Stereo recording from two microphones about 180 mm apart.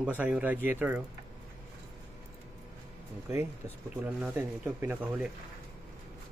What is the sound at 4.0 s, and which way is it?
Speech, 10° right (ahead or behind).